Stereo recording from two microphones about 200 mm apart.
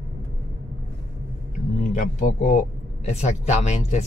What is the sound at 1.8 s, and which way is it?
Speech, 35° left (ahead or behind).